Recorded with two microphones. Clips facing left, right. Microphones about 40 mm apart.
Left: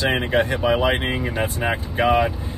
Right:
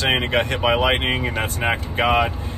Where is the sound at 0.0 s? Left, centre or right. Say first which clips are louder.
Right 1 dB; right.